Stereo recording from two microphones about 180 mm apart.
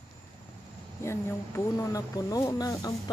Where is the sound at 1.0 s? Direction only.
15° left (ahead or behind).